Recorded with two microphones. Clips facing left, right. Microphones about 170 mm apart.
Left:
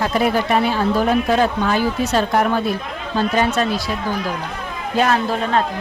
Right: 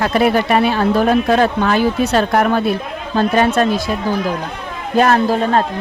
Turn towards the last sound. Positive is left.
turn(degrees=-40)  # may be behind; listen again after turning